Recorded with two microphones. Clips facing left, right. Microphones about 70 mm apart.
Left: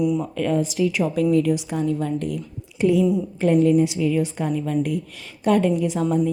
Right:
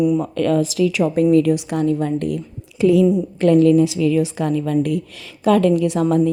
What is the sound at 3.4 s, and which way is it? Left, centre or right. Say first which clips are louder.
A woman's voice: right 4 dB; right.